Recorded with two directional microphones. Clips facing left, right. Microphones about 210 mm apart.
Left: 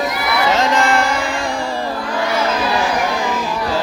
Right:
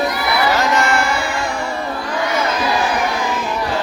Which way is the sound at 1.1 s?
90° left.